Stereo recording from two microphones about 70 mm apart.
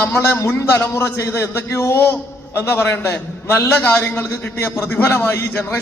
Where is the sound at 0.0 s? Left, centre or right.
Left.